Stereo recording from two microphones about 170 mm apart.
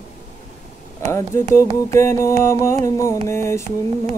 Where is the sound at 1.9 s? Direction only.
15° left (ahead or behind).